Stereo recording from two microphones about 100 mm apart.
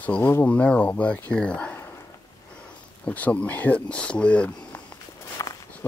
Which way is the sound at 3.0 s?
15° left (ahead or behind).